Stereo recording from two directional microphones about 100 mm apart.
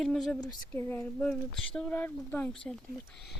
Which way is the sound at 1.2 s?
10° left (ahead or behind).